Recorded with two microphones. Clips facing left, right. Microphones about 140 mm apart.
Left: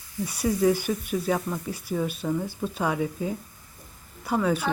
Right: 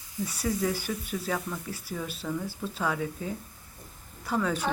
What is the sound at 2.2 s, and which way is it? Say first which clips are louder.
Speech: left 5 dB; 25° left (ahead or behind).